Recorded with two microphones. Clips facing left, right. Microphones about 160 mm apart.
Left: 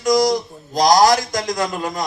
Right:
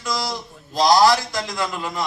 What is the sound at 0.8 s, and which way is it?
A man's voice, 40° left (ahead or behind).